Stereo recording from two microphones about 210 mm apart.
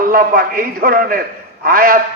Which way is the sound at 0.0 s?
45° right (ahead or behind).